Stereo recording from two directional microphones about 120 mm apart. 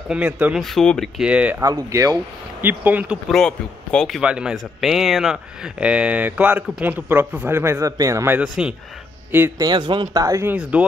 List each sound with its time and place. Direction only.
0.1 s speech: 10° right (ahead or behind)
0.6 s speech: centre (ahead or behind)
1.6 s speech: 30° right (ahead or behind)
2.6 s speech: 15° right (ahead or behind)
3.3 s speech: 5° left (ahead or behind)
4.2 s speech: 10° right (ahead or behind); by 8.4 s 25° right (ahead or behind)
8.4 s speech: 5° right (ahead or behind)
9.6 s speech: 40° right (ahead or behind)
10.2 s speech: 25° right (ahead or behind)
10.7 s speech: 10° right (ahead or behind)